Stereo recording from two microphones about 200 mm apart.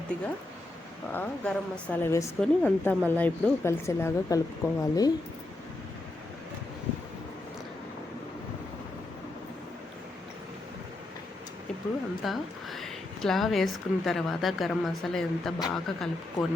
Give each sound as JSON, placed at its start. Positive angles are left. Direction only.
{"t": 0.1, "sound": "a woman's voice", "side_deg": 5}
{"t": 12.2, "sound": "speech", "side_deg": 0}